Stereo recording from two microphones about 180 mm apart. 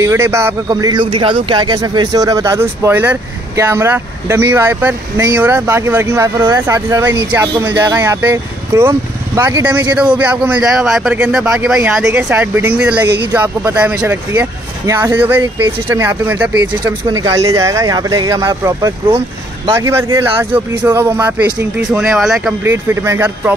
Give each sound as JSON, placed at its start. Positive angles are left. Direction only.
{"t": 0.0, "sound": "speech", "side_deg": -15}
{"t": 22.6, "sound": "speech", "side_deg": -15}